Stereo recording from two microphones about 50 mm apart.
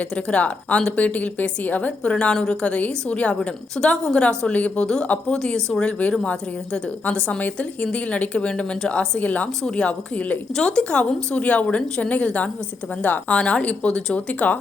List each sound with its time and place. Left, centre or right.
0.3 s a woman's voice: left
2.0 s a woman's voice: centre
4.0 s a woman's voice: centre
5.8 s a woman's voice: left
9.6 s a woman's voice: centre